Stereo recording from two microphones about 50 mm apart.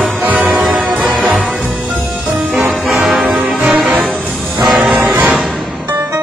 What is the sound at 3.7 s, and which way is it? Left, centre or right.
Music, centre.